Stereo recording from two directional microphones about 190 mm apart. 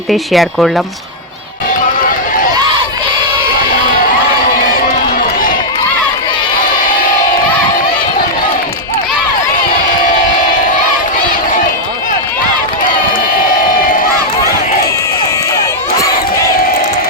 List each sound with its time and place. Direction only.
0.1 s speech: centre (ahead or behind)
2.0 s run: 45° left (ahead or behind)